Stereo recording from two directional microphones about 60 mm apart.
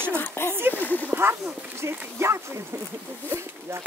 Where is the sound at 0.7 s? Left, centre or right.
Left.